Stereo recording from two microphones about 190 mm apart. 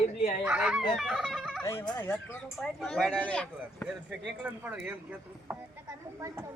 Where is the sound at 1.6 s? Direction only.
15° left (ahead or behind).